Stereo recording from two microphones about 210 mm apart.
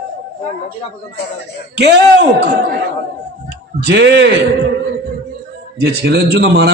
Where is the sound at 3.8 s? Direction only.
55° right (ahead or behind).